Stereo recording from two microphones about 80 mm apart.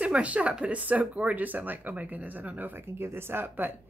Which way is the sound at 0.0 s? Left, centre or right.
Centre.